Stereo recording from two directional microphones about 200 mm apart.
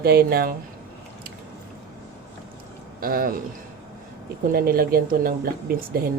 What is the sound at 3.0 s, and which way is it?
Speech, 45° right (ahead or behind).